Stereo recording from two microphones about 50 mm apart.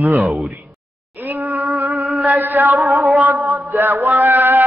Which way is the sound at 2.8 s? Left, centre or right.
Right.